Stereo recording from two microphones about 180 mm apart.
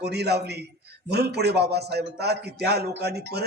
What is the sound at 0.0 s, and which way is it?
A man's voice, 65° right (ahead or behind).